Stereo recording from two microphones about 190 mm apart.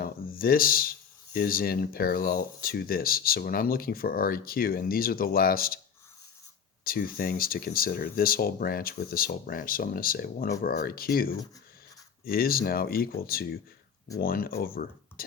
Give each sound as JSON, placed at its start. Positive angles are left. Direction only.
{"t": 0.0, "sound": "speech", "side_deg": 50}
{"t": 6.8, "sound": "speech", "side_deg": 50}